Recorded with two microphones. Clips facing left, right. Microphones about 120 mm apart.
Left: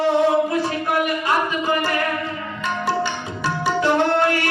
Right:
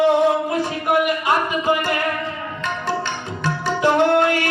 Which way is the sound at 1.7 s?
15° right (ahead or behind).